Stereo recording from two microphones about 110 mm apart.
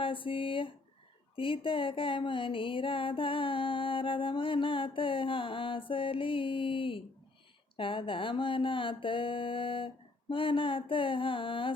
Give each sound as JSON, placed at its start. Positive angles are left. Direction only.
{"t": 0.0, "sound": "music", "side_deg": 50}